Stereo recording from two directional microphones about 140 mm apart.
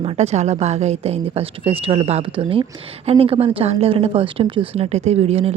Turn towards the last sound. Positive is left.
turn(degrees=-45)  # may be behind; listen again after turning